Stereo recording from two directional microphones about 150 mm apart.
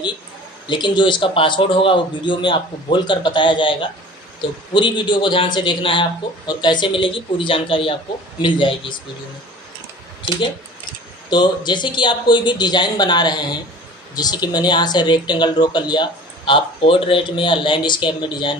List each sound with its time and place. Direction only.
0.7 s speech: 30° left (ahead or behind)
11.2 s speech: 30° left (ahead or behind)